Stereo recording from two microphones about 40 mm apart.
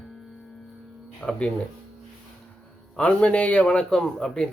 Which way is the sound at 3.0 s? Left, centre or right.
Left.